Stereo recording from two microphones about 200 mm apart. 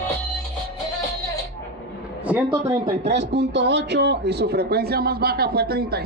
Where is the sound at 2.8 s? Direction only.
60° right (ahead or behind).